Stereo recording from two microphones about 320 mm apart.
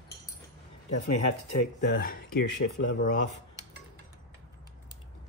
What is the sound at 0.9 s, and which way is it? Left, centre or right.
Speech, left.